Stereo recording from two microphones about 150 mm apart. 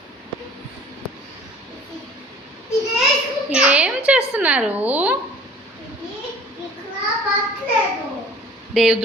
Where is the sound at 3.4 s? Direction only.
5° right (ahead or behind).